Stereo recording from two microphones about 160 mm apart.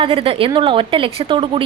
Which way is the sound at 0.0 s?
35° right (ahead or behind).